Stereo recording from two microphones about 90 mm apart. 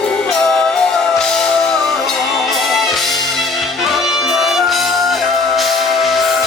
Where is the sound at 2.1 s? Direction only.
Centre (ahead or behind).